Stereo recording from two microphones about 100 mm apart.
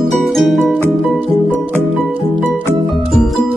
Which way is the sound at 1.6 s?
15° right (ahead or behind).